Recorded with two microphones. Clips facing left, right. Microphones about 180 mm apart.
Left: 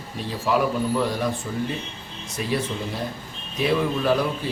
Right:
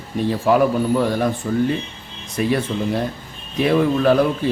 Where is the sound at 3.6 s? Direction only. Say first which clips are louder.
Right 5 dB; 55° right (ahead or behind).